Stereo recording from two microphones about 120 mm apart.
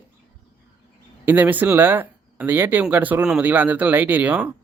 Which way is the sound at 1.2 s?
15° right (ahead or behind).